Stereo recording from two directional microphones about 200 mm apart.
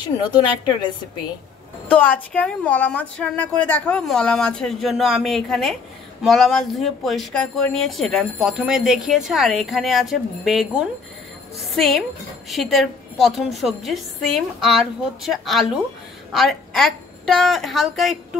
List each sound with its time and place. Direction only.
0.0 s a woman's voice: 20° left (ahead or behind)
1.9 s a woman's voice: 10° left (ahead or behind)